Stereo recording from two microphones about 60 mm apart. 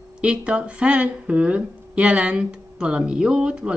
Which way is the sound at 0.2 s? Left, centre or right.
Centre.